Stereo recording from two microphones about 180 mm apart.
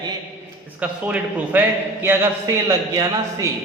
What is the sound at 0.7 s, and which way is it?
A man's voice, 10° right (ahead or behind).